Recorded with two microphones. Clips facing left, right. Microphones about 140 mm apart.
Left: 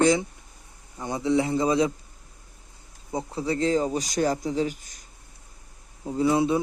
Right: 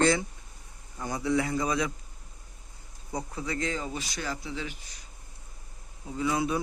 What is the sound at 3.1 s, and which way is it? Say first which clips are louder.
Speech: left 6 dB; 30° left (ahead or behind).